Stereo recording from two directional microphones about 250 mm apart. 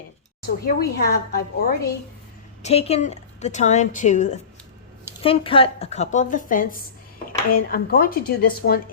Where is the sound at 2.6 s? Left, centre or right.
Left.